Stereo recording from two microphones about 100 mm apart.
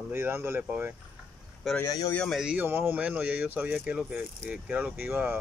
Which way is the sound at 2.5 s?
20° right (ahead or behind).